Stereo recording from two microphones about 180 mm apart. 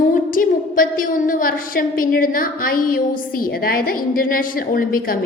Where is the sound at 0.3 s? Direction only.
50° left (ahead or behind).